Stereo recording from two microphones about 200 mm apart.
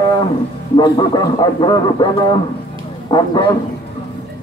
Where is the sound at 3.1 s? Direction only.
20° left (ahead or behind).